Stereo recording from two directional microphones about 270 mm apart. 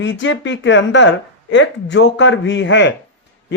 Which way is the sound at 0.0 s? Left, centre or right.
Left.